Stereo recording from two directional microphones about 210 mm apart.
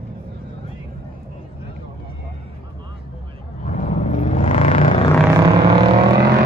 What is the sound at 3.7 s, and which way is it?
Vehicle, 35° left (ahead or behind).